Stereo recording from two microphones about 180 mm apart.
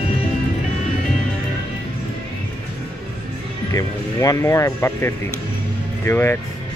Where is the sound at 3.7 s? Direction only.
15° left (ahead or behind).